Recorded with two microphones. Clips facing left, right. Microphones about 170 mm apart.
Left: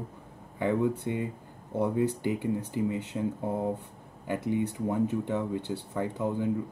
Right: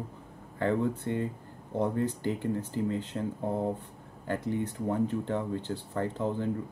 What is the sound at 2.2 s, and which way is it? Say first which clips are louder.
Speech: left 1 dB; 15° left (ahead or behind).